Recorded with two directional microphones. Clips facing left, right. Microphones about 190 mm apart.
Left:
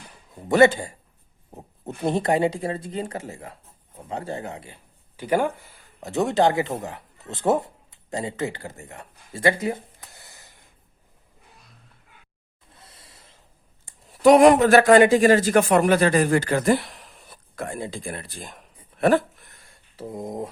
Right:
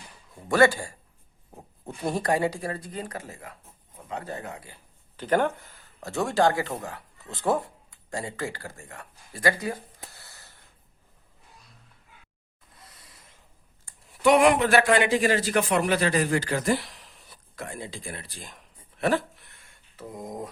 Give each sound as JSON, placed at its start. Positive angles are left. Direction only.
{"t": 0.3, "sound": "speech", "side_deg": 20}
{"t": 1.5, "sound": "a sound", "side_deg": 20}
{"t": 2.0, "sound": "speech", "side_deg": 25}
{"t": 5.1, "sound": "speech", "side_deg": 10}
{"t": 10.1, "sound": "gasp", "side_deg": 20}
{"t": 12.8, "sound": "a sound", "side_deg": 30}
{"t": 14.1, "sound": "speech", "side_deg": 40}